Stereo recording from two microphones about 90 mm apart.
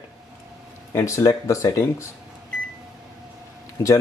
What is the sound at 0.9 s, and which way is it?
Speech, 30° left (ahead or behind).